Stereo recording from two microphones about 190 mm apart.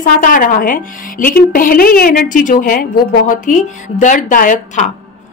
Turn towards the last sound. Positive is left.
turn(degrees=40)  # may be behind; listen again after turning